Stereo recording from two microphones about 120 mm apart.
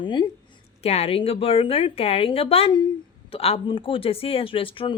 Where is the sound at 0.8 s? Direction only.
60° left (ahead or behind).